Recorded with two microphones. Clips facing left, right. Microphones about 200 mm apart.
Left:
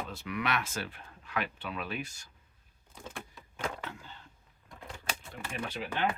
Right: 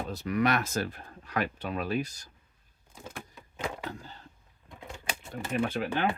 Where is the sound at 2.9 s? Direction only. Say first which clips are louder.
Right 1 dB; 5° right (ahead or behind).